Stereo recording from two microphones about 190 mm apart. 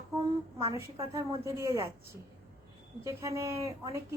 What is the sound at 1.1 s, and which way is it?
Speech, 15° right (ahead or behind).